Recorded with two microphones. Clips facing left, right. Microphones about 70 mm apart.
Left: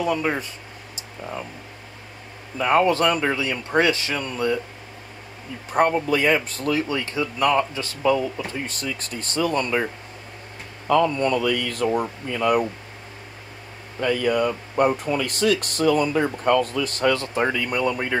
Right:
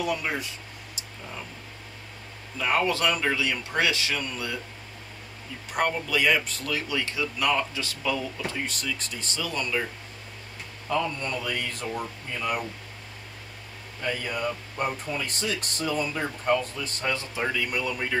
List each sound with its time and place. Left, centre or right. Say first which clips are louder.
0.0 s speech: left 5 dB; left
0.9 s a sound: left 8 dB; left
2.5 s speech: left 7 dB; left
5.7 s speech: left 7 dB; left
10.9 s speech: left 9 dB; left
13.9 s speech: left 10 dB; left